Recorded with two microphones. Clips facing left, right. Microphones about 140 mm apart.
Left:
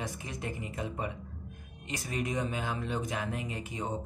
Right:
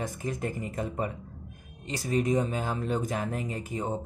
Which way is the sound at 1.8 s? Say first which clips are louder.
Right 7 dB; 35° right (ahead or behind).